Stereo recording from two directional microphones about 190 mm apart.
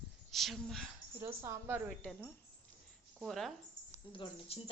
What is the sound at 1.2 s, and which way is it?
Speech, 15° right (ahead or behind).